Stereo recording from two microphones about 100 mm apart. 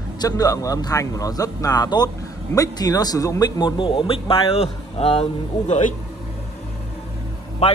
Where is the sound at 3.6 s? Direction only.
55° left (ahead or behind); by 5.3 s 85° left.